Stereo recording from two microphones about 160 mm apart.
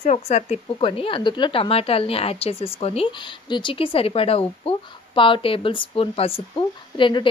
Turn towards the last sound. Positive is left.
turn(degrees=30)  # may be behind; listen again after turning